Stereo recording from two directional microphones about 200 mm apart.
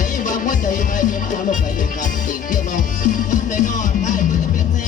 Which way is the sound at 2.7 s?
40° left (ahead or behind).